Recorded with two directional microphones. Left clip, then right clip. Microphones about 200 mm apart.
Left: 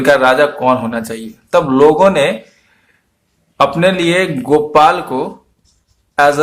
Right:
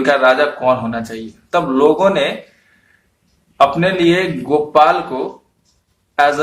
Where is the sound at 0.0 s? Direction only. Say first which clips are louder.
Left 2 dB; 45° left (ahead or behind).